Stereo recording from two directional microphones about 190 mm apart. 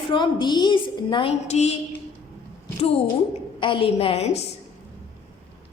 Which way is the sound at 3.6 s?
25° left (ahead or behind).